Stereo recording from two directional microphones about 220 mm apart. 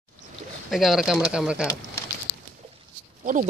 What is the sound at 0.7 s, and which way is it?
Speech, centre (ahead or behind).